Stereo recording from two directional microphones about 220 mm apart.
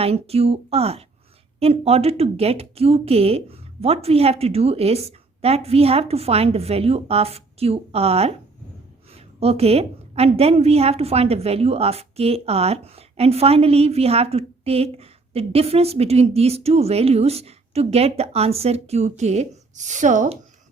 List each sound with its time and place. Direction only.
0.0 s a woman's voice: 25° right (ahead or behind)